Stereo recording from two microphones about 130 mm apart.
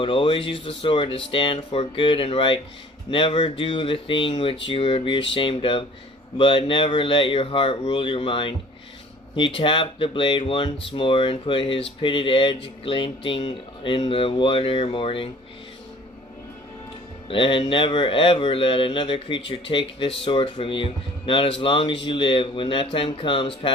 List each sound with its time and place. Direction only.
0.0 s a man's voice: 40° left (ahead or behind)
17.2 s a man's voice: 40° left (ahead or behind)